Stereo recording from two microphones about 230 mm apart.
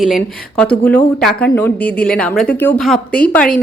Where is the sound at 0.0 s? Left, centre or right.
Centre.